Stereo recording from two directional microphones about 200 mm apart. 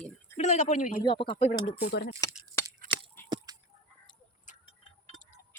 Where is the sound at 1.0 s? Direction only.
25° left (ahead or behind).